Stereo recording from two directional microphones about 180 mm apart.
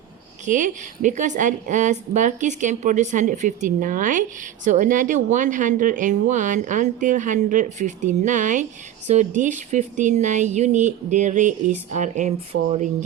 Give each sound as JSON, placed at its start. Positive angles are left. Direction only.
{"t": 0.4, "sound": "a woman's voice", "side_deg": -45}